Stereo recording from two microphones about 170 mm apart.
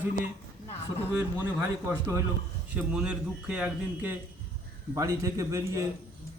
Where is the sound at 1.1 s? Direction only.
15° right (ahead or behind).